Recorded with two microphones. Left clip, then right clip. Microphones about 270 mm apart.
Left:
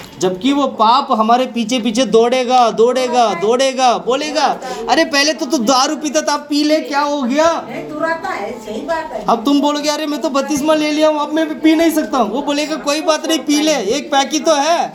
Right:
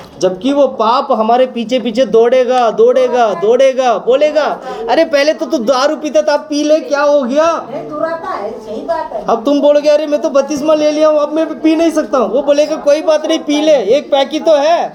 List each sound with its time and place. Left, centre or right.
0.2 s speech: left
9.2 s speech: left